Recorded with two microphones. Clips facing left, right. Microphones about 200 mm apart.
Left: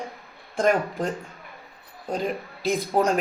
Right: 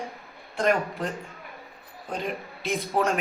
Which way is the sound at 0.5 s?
45° left (ahead or behind).